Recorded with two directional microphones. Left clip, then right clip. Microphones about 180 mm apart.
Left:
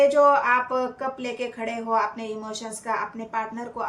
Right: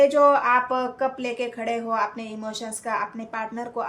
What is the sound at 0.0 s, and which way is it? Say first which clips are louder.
Speech: even; 35° right (ahead or behind).